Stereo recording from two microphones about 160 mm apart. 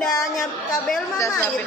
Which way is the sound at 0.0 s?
Centre (ahead or behind).